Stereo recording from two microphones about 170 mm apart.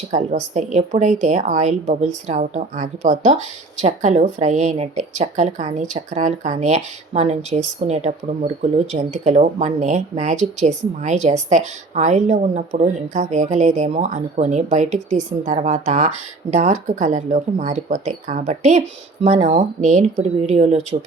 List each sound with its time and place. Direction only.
0.1 s speech: 45° right (ahead or behind)